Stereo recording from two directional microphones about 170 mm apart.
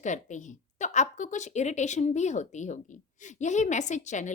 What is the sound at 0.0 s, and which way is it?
A woman's voice, 45° left (ahead or behind).